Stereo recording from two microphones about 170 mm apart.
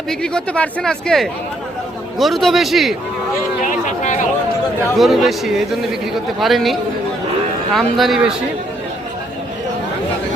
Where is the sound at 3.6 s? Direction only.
45° left (ahead or behind).